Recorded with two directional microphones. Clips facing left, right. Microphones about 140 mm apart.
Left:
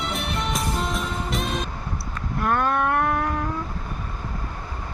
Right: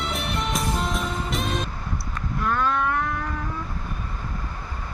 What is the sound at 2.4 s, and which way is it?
Vehicle, 55° left (ahead or behind).